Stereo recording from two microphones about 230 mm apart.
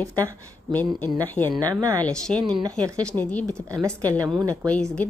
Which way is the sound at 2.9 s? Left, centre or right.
Centre.